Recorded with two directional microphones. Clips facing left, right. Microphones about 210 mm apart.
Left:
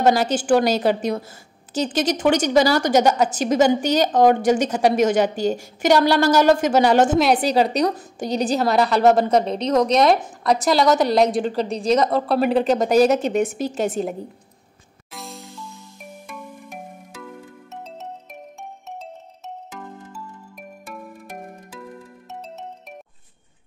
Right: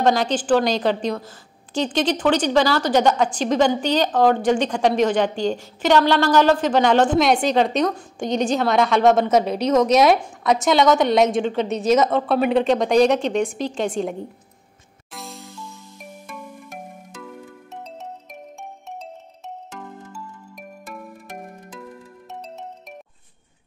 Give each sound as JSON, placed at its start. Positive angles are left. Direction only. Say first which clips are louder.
{"t": 0.0, "sound": "a woman's voice", "louder": "left 1 dB", "side_deg": 5}
{"t": 8.3, "sound": "a woman's voice", "louder": "right 1 dB", "side_deg": 35}
{"t": 8.5, "sound": "a woman's voice", "louder": "left 1 dB", "side_deg": 0}
{"t": 15.1, "sound": "music", "louder": "even", "side_deg": 0}
{"t": 20.9, "sound": "music", "louder": "left 1 dB", "side_deg": 0}